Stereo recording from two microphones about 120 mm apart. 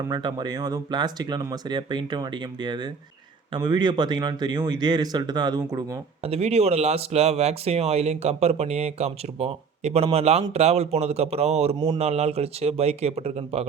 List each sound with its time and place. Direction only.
0.1 s speech: 40° right (ahead or behind)
6.2 s speech: 60° right (ahead or behind)